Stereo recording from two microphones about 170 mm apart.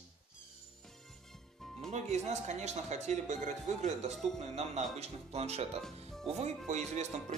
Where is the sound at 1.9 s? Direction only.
40° right (ahead or behind).